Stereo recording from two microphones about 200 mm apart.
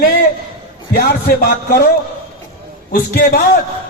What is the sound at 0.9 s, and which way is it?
Speech, 50° left (ahead or behind).